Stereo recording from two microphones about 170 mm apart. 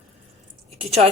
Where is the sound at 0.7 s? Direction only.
40° right (ahead or behind).